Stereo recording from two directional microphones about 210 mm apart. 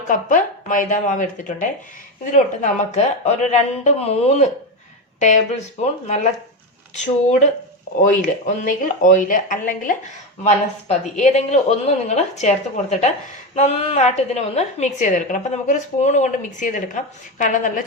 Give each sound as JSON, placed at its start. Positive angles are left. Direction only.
{"t": 0.1, "sound": "a woman's voice", "side_deg": 40}
{"t": 5.8, "sound": "a woman's voice", "side_deg": 30}